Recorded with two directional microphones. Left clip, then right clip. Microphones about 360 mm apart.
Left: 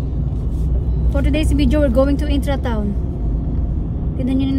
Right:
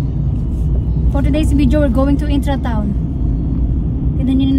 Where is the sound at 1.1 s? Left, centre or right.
Right.